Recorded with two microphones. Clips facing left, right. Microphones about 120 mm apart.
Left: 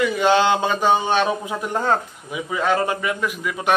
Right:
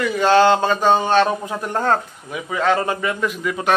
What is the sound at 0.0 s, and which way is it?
A man's voice, 15° left (ahead or behind).